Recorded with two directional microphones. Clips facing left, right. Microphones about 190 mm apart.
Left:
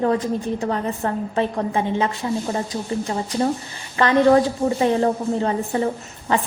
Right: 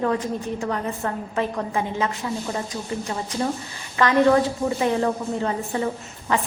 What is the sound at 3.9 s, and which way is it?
A woman's voice, 30° left (ahead or behind).